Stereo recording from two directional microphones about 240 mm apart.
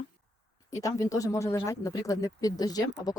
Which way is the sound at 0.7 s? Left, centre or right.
Centre.